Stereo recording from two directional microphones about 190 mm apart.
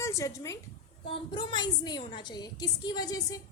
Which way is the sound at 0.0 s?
15° left (ahead or behind).